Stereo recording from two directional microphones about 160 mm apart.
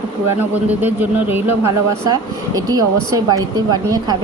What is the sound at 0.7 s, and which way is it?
Speech, 10° right (ahead or behind).